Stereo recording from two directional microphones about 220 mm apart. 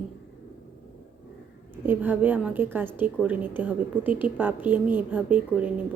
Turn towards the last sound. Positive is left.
turn(degrees=-5)  # may be behind; listen again after turning